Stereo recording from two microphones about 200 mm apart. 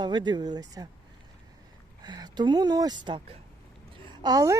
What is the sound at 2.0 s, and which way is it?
Speech, 20° right (ahead or behind).